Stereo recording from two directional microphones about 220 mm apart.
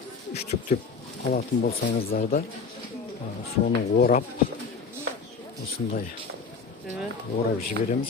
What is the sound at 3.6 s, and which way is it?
Speech, 40° left (ahead or behind).